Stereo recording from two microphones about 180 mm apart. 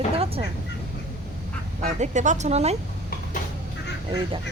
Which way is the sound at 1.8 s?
40° right (ahead or behind).